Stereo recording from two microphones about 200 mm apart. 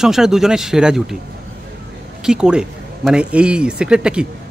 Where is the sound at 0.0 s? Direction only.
Centre (ahead or behind).